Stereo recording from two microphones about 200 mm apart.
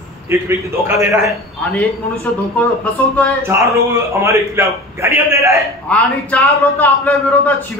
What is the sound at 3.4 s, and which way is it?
A man's voice, 15° right (ahead or behind).